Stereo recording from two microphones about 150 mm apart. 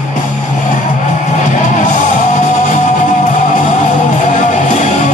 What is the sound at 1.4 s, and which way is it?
Music, 55° left (ahead or behind).